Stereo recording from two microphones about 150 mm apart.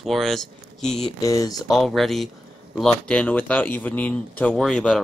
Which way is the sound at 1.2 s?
20° left (ahead or behind).